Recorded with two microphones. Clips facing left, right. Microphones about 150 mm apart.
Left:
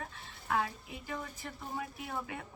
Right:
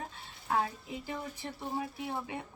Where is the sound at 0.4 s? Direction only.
30° right (ahead or behind).